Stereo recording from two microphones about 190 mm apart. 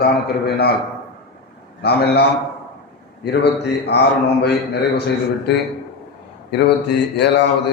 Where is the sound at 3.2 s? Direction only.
60° left (ahead or behind).